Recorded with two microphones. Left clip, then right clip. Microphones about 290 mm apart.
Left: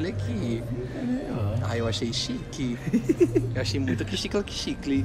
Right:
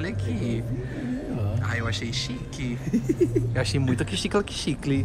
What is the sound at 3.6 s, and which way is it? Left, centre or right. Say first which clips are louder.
Speech: right 2 dB; centre.